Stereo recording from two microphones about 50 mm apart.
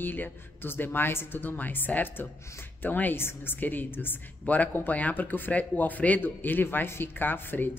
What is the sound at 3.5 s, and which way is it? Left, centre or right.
A man's voice, left.